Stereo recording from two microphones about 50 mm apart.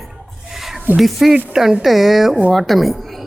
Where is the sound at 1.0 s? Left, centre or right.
Centre.